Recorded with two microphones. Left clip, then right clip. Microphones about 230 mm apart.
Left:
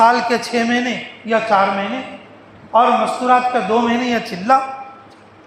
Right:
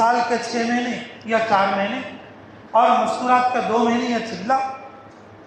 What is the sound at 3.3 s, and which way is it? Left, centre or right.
Speech, left.